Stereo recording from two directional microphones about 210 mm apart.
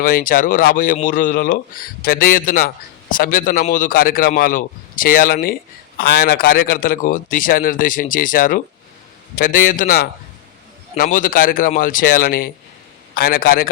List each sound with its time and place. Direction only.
0.0 s a man's voice: 40° left (ahead or behind)